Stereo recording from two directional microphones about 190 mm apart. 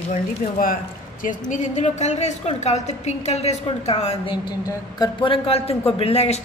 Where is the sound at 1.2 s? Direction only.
40° left (ahead or behind).